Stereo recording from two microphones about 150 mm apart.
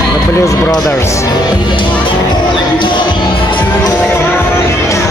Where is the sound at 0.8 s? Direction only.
20° left (ahead or behind).